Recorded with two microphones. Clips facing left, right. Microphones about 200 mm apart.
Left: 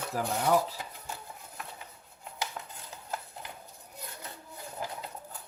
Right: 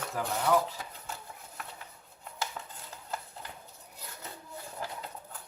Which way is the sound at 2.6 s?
5° left (ahead or behind).